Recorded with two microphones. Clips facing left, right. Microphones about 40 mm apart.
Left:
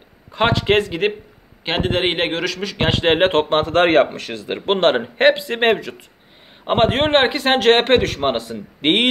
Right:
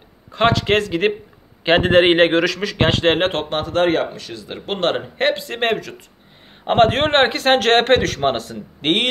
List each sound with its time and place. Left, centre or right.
0.3 s a man's voice: centre
1.6 s a man's voice: centre
3.3 s speech: left
6.6 s a man's voice: centre